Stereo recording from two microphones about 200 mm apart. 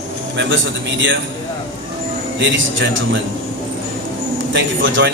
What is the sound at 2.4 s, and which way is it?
Speech, 65° right (ahead or behind).